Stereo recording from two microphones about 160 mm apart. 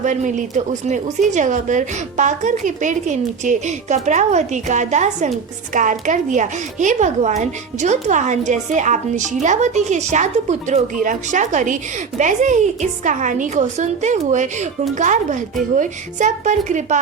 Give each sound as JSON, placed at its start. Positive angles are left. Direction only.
{"t": 0.0, "sound": "a woman's voice", "side_deg": -50}